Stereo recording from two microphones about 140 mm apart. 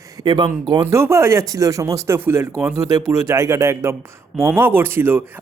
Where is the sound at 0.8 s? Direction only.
20° right (ahead or behind).